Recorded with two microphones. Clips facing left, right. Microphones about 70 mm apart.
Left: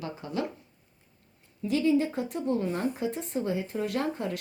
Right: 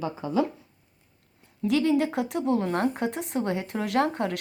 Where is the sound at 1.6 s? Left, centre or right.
Right.